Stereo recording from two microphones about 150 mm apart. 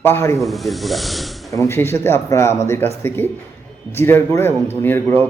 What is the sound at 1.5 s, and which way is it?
Speech, 20° left (ahead or behind).